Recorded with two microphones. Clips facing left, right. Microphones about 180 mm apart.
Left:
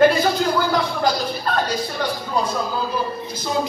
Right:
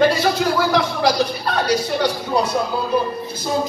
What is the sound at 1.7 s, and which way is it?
Speech, 75° right (ahead or behind).